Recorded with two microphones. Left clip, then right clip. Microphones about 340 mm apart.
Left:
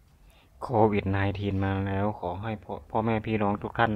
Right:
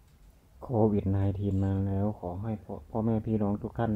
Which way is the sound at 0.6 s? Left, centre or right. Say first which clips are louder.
Left 4 dB; left.